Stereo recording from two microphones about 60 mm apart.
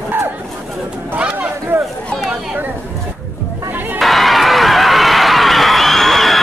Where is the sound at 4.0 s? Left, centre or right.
Centre.